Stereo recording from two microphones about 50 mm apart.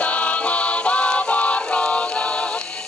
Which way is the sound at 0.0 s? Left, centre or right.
Left.